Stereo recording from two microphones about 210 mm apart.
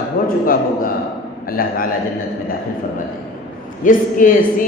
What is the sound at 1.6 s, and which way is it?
Speech, 45° left (ahead or behind).